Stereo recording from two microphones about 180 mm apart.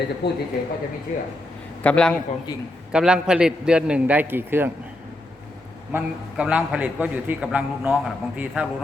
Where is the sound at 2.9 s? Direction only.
5° right (ahead or behind).